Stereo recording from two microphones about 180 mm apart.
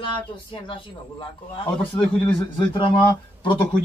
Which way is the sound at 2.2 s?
25° left (ahead or behind).